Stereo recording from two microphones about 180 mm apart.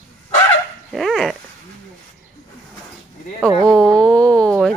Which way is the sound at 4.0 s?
5° left (ahead or behind).